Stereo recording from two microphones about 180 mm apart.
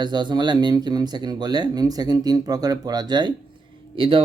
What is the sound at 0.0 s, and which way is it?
Speech, 25° right (ahead or behind).